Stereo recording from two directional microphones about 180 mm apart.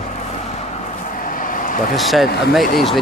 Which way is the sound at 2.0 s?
Centre (ahead or behind).